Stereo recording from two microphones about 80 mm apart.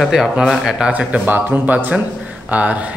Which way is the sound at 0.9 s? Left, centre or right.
Centre.